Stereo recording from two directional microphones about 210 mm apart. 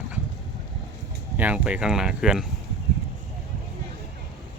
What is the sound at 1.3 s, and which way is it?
A man's voice, 5° right (ahead or behind).